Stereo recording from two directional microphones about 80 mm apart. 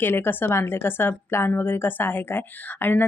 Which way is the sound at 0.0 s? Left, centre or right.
Left.